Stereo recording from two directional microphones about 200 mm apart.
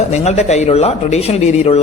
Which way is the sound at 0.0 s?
35° left (ahead or behind).